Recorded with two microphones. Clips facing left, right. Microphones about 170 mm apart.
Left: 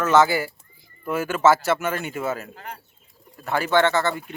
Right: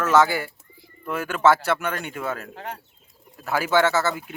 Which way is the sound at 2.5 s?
90° right.